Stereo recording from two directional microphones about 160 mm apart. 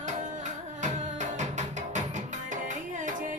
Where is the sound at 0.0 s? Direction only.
50° right (ahead or behind).